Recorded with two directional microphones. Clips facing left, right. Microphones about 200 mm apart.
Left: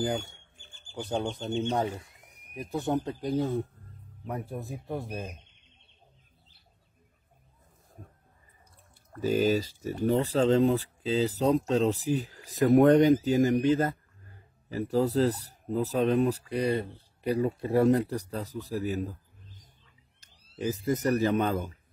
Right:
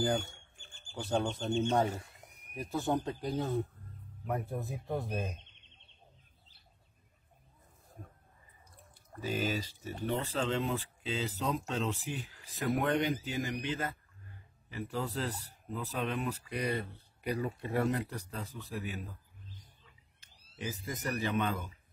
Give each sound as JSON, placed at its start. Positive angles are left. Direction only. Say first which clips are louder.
{"t": 1.5, "sound": "speech", "louder": "even", "side_deg": 25}
{"t": 9.2, "sound": "speech", "louder": "left 9 dB", "side_deg": 40}